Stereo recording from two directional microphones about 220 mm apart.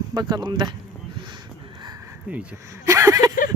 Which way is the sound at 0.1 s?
20° right (ahead or behind).